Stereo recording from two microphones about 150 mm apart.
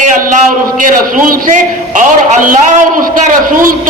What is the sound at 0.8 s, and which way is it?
A man's voice, 65° right (ahead or behind).